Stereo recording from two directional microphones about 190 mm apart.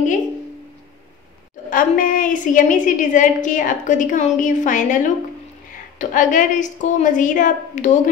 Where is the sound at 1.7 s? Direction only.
45° left (ahead or behind).